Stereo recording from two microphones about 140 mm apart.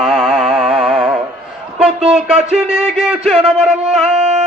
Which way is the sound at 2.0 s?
45° right (ahead or behind).